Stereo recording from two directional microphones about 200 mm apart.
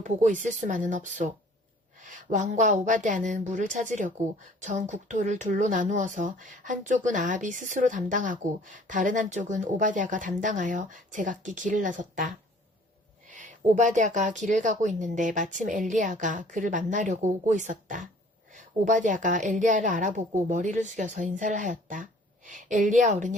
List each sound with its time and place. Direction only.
0.0 s speech: 40° right (ahead or behind)
13.7 s speech: 40° right (ahead or behind)